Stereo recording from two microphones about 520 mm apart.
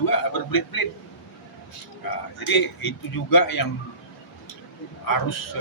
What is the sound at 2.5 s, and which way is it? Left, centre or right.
A man's voice, left.